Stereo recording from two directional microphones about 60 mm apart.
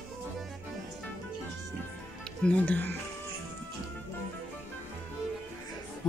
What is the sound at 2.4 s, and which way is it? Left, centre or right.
Speech, left.